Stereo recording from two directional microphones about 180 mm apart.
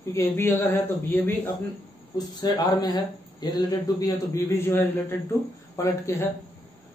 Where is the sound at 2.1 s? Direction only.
20° left (ahead or behind).